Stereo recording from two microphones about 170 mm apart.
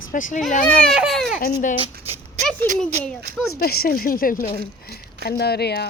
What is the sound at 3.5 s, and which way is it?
Speech, 65° left (ahead or behind).